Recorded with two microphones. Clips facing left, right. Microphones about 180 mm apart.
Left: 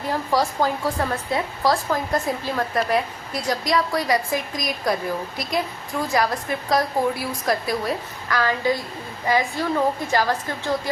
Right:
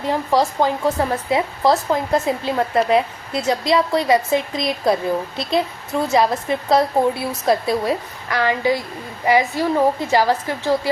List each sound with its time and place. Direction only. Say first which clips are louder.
0.1 s a woman's voice: right 4 dB; 20° right (ahead or behind)